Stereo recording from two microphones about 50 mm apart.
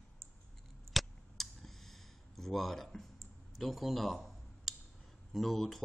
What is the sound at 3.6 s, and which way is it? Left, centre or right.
Speech, centre.